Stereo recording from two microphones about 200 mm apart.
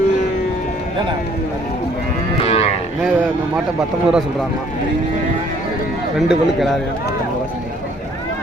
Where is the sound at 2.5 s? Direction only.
30° left (ahead or behind).